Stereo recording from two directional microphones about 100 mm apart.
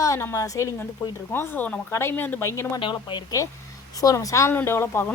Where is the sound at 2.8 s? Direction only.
55° left (ahead or behind).